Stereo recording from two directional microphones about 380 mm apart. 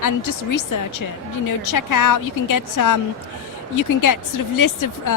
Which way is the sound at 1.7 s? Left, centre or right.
Left.